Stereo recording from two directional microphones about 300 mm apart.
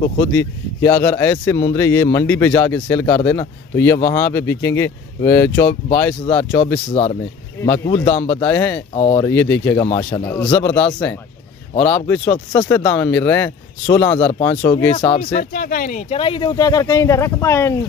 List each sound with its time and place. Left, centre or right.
0.2 s speech: centre
11.7 s a man's voice: centre
15.3 s speech: left; by 17.7 s centre